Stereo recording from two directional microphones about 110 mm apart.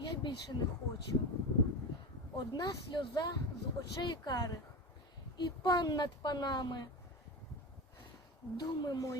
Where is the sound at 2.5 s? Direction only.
40° left (ahead or behind).